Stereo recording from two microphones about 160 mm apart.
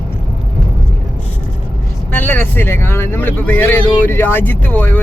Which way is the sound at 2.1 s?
10° left (ahead or behind).